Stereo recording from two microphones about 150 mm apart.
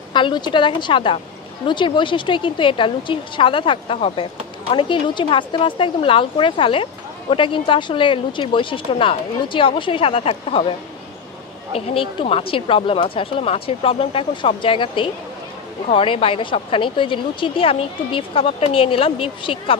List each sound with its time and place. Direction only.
0.1 s a woman's voice: 30° left (ahead or behind)
11.7 s a woman's voice: 35° left (ahead or behind)